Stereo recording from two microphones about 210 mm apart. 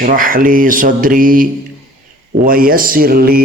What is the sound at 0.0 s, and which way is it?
A man's voice, 40° right (ahead or behind).